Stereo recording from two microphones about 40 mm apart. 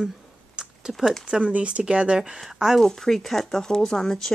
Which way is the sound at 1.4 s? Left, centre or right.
Right.